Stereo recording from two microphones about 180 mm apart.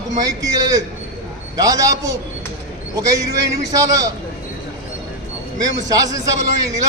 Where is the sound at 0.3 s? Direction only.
20° right (ahead or behind).